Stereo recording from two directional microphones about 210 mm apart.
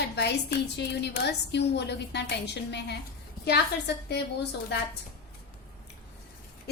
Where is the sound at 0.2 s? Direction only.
50° left (ahead or behind).